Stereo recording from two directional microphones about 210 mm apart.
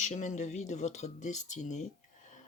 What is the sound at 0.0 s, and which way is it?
Speech, 35° left (ahead or behind).